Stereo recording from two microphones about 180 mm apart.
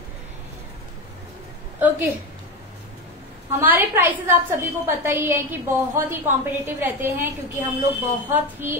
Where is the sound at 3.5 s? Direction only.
10° right (ahead or behind).